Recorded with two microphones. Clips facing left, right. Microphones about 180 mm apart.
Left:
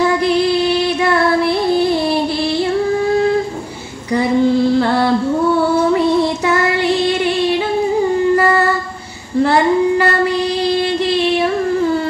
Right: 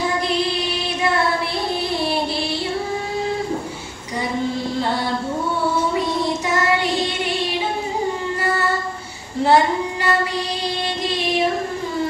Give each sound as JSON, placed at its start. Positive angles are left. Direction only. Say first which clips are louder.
{"t": 4.7, "sound": "a sound", "louder": "left 8 dB", "side_deg": 65}
{"t": 5.9, "sound": "child singing", "louder": "left 7 dB", "side_deg": 65}
{"t": 9.4, "sound": "child singing", "louder": "left 4 dB", "side_deg": 60}